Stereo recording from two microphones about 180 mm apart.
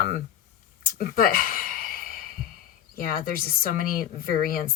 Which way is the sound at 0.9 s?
50° left (ahead or behind).